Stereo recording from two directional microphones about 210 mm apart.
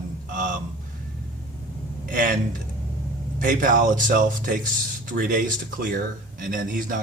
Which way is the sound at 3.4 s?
40° right (ahead or behind).